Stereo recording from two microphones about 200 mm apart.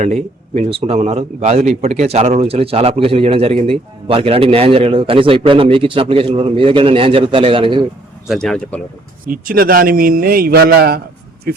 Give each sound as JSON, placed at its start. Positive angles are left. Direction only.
{"t": 0.0, "sound": "a man's voice", "side_deg": -35}
{"t": 8.3, "sound": "speech", "side_deg": 0}
{"t": 9.2, "sound": "a man's voice", "side_deg": -45}